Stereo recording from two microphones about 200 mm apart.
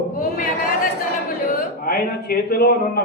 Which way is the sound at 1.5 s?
45° left (ahead or behind).